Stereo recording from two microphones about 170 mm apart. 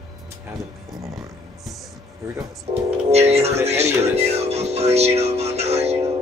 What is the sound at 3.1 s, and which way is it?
Speech, 40° right (ahead or behind).